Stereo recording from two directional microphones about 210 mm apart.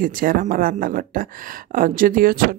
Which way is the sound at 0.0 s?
40° right (ahead or behind).